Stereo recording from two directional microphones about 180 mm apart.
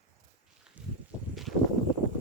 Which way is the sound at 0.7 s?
5° right (ahead or behind).